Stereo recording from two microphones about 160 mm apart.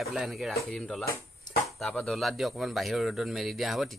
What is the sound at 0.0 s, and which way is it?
Speech, centre (ahead or behind).